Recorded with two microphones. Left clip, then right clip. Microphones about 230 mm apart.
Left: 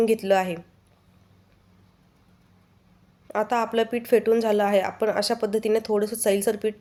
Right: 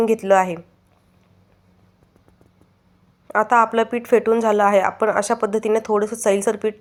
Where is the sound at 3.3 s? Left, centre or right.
Centre.